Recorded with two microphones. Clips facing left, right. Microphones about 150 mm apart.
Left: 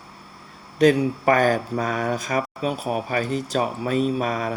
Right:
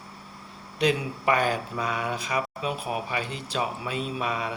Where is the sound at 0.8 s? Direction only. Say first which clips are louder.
Left 8 dB; 45° left (ahead or behind).